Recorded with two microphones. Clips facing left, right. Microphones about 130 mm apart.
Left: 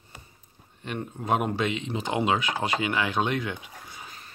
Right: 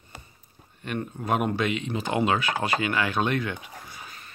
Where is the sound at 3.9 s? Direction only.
25° left (ahead or behind).